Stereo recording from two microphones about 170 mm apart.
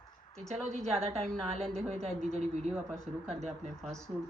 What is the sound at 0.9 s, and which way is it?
Speech, 35° right (ahead or behind).